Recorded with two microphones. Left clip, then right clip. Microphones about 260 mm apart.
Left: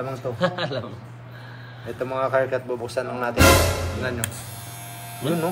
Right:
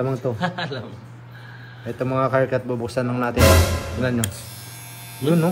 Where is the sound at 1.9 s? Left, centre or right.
Right.